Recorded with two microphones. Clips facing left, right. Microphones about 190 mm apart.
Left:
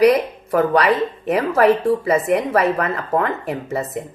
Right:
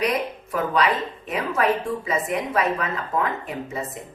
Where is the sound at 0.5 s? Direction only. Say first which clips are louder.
Left 7 dB; 70° left (ahead or behind).